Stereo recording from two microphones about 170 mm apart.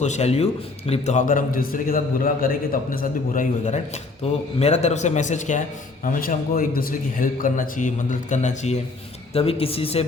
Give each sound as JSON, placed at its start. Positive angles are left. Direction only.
{"t": 0.0, "sound": "a man's voice", "side_deg": 40}
{"t": 4.2, "sound": "a man's voice", "side_deg": 40}
{"t": 6.6, "sound": "a man's voice", "side_deg": 55}